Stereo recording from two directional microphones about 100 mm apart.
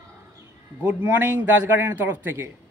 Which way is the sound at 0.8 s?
20° right (ahead or behind).